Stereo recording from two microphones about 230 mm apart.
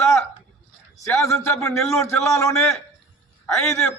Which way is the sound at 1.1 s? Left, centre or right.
Centre.